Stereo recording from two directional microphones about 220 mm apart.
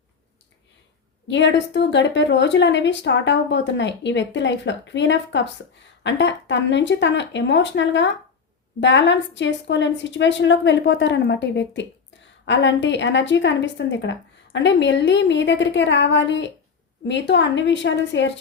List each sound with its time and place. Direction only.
1.3 s a woman's voice: 55° left (ahead or behind)